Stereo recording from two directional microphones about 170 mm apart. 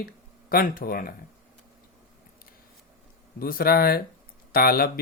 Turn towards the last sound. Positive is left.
turn(degrees=60)  # may be behind; listen again after turning